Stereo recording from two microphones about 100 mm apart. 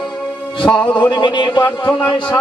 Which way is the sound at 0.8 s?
50° left (ahead or behind).